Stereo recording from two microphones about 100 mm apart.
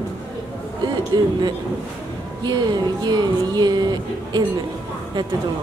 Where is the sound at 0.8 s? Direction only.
45° right (ahead or behind).